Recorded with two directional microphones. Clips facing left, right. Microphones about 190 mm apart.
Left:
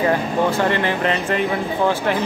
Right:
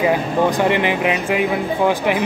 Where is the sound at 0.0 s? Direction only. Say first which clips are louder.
Right 2 dB; 15° right (ahead or behind).